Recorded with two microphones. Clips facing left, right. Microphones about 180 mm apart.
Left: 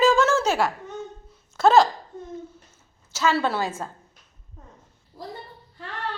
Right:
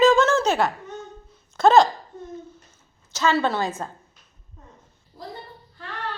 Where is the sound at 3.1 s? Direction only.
5° left (ahead or behind).